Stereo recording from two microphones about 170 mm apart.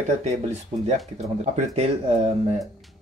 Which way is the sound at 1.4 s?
40° right (ahead or behind).